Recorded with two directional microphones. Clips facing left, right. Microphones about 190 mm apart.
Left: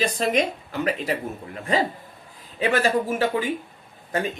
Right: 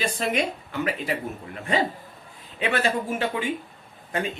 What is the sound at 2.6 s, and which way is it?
Speech, 35° left (ahead or behind).